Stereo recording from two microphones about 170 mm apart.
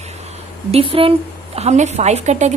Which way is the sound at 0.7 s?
35° right (ahead or behind).